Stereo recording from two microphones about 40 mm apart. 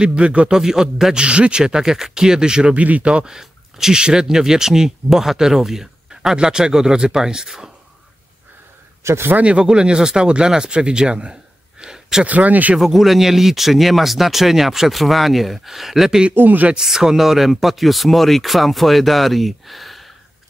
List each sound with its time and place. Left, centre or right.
0.0 s speech: right
0.5 s speech: centre
1.1 s speech: right
1.6 s speech: centre
2.7 s speech: right
3.3 s a sound: centre
4.0 s speech: centre
9.4 s speech: right
11.8 s a sound: centre
12.3 s speech: right
12.9 s speech: centre
16.3 s speech: right
16.7 s speech: centre